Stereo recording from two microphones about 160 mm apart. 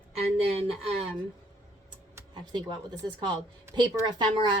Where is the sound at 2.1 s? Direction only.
25° right (ahead or behind).